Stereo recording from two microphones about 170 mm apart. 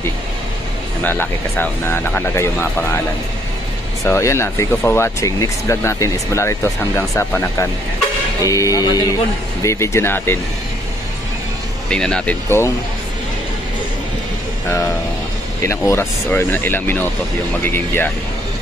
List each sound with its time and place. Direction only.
1.0 s speech: 10° left (ahead or behind)
4.0 s speech: 15° left (ahead or behind)
11.9 s speech: 5° left (ahead or behind)
14.7 s speech: 15° left (ahead or behind)